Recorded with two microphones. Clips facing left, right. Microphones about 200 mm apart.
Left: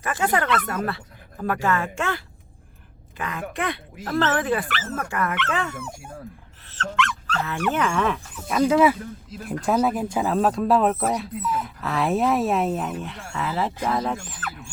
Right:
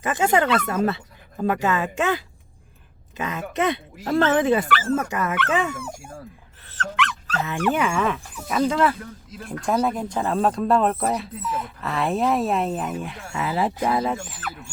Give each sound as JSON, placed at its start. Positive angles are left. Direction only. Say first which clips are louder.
{"t": 0.0, "sound": "speech", "louder": "right 3 dB", "side_deg": -20}
{"t": 7.3, "sound": "speech", "louder": "right 2 dB", "side_deg": -15}